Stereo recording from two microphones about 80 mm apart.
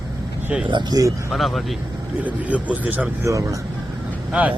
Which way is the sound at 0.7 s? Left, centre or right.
Right.